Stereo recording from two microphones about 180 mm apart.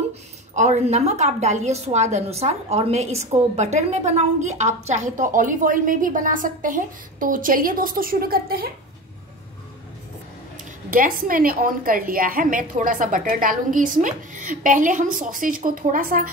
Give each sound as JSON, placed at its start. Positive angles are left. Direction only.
{"t": 0.6, "sound": "a woman's voice", "side_deg": -40}
{"t": 10.9, "sound": "a woman's voice", "side_deg": -50}